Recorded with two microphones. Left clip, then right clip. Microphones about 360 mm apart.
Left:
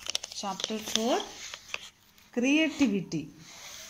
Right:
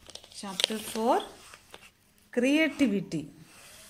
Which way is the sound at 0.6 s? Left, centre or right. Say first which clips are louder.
Right 8 dB; right.